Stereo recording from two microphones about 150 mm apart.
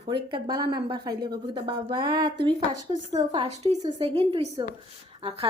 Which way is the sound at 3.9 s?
40° right (ahead or behind).